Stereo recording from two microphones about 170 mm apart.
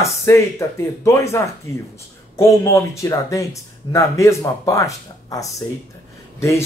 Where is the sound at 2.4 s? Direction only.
15° left (ahead or behind).